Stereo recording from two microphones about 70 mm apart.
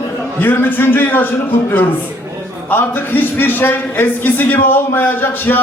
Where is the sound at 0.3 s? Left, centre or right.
Left.